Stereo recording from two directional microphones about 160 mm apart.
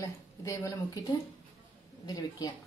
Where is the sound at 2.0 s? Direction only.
25° left (ahead or behind).